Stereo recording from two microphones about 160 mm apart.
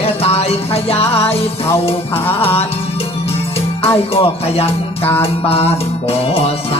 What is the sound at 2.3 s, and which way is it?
Music, 35° left (ahead or behind).